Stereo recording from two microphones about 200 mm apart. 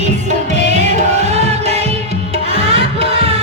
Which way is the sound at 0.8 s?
35° right (ahead or behind).